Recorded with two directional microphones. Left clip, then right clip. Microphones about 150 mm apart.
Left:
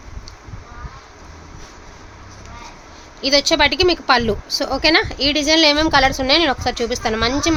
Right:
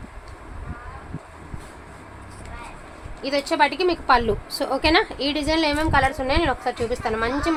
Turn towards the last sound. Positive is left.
turn(degrees=65)  # may be behind; listen again after turning